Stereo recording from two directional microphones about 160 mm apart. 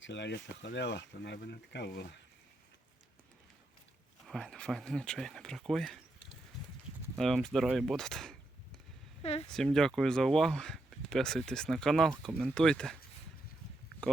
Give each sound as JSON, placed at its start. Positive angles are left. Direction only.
{"t": 0.1, "sound": "speech", "side_deg": 90}
{"t": 4.3, "sound": "speech", "side_deg": 0}
{"t": 7.2, "sound": "speech", "side_deg": 0}
{"t": 9.2, "sound": "speech", "side_deg": 40}
{"t": 9.5, "sound": "speech", "side_deg": 5}